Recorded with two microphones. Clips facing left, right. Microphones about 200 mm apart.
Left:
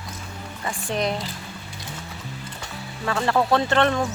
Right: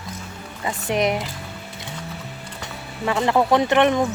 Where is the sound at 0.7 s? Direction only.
20° right (ahead or behind).